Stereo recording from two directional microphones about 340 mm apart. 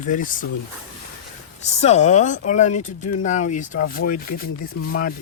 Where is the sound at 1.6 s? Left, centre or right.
Centre.